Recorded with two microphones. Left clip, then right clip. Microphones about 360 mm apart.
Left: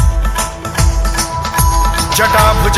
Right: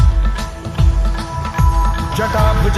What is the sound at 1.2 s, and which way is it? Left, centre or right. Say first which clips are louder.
Music: left 6 dB; left.